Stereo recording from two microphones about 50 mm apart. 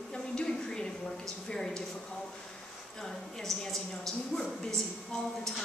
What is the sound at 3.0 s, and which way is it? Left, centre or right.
A woman's voice, centre.